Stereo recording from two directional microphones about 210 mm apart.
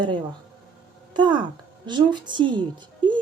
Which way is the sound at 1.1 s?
20° right (ahead or behind).